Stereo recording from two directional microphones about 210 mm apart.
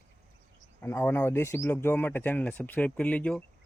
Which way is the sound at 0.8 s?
10° left (ahead or behind).